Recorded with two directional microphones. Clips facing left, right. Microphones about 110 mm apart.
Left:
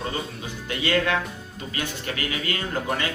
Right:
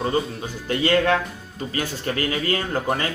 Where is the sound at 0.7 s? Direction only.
40° right (ahead or behind).